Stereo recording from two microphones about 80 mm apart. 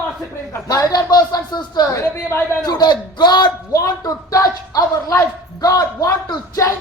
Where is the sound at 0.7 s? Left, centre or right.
Left.